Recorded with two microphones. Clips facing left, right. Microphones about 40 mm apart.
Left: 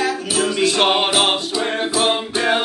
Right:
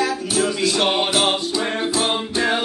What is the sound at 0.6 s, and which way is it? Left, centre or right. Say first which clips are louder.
Music: left 3 dB; left.